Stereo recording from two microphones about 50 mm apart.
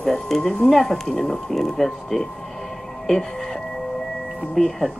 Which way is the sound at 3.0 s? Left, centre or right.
Centre.